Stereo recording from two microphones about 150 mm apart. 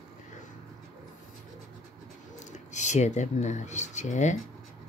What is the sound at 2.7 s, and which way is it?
Speech, 50° left (ahead or behind).